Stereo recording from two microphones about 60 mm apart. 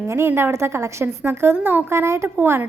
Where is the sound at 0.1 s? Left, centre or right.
Right.